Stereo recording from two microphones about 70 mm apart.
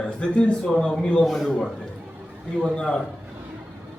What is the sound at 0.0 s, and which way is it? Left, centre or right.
A man's voice, centre.